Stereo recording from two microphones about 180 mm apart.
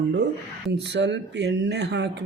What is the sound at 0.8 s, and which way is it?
Speech, 75° right (ahead or behind).